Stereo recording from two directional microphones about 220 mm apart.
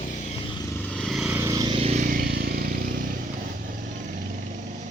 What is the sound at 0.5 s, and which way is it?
Vehicle, 15° left (ahead or behind).